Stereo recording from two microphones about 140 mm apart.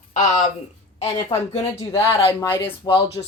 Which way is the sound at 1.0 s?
50° left (ahead or behind).